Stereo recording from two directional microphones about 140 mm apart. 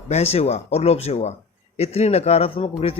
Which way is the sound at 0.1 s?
50° left (ahead or behind).